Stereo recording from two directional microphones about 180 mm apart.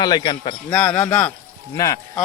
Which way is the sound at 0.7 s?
5° left (ahead or behind).